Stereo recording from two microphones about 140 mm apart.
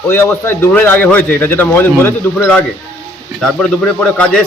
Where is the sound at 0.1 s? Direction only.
15° left (ahead or behind).